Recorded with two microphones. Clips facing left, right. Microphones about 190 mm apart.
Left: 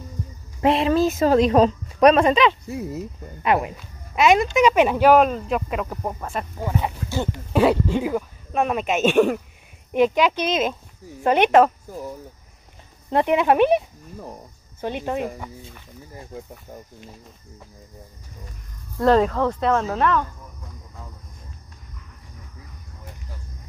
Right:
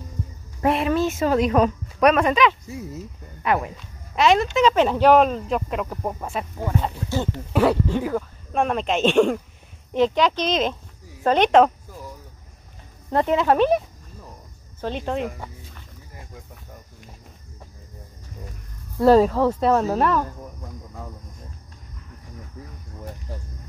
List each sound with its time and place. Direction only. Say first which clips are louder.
0.6 s speech: left 2 dB; 20° left (ahead or behind)
0.9 s speech: left 3 dB; 35° left (ahead or behind)
2.6 s speech: left 5 dB; 60° left (ahead or behind)
3.4 s speech: left 2 dB; 20° left (ahead or behind)
3.7 s speech: even; 10° left (ahead or behind)
6.1 s speech: even; 10° right (ahead or behind)
6.6 s speech: even; 10° left (ahead or behind)
13.1 s speech: left 1 dB; 15° left (ahead or behind)
16.3 s speech: left 10 dB; 25° left (ahead or behind)
18.9 s speech: right 2 dB; 5° right (ahead or behind)